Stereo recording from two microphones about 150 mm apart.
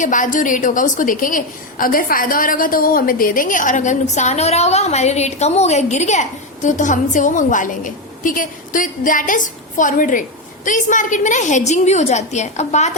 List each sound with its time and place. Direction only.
0.0 s a woman's voice: 60° left (ahead or behind)